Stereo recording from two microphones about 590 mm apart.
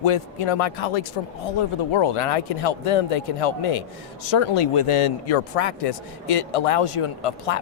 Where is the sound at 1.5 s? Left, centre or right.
Left.